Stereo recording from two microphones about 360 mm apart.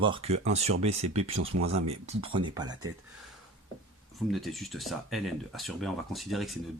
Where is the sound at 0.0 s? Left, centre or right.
Centre.